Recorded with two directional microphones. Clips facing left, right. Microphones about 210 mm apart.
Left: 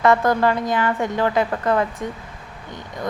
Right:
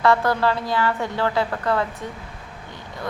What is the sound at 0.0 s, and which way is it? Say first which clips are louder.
A woman's voice: left 2 dB; 20° left (ahead or behind).